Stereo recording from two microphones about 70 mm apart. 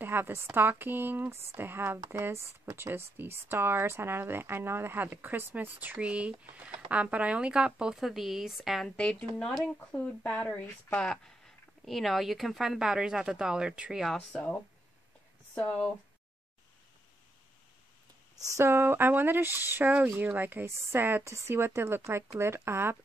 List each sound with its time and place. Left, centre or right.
0.0 s speech: right; by 8.8 s centre
8.8 s speech: centre
14.1 s speech: centre
18.6 s speech: right
21.2 s speech: right